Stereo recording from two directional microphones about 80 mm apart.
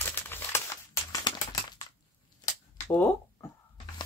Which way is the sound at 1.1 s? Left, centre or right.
Left.